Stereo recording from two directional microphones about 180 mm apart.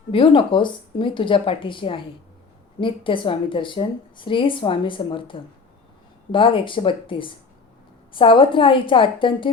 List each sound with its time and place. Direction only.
0.1 s a woman's voice: 30° left (ahead or behind)